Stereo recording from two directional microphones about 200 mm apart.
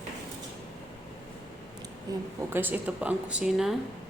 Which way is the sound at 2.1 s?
20° right (ahead or behind).